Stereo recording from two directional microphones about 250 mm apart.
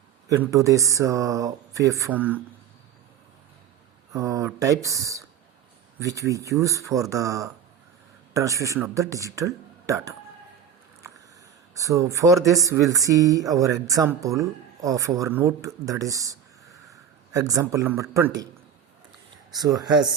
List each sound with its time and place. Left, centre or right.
0.3 s speech: centre
4.1 s speech: centre
11.8 s a man's voice: centre
19.5 s speech: centre